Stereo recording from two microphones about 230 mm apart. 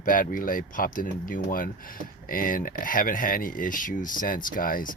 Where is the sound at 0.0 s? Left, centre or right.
Left.